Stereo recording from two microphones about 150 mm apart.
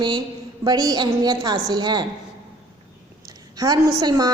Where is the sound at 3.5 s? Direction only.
25° right (ahead or behind).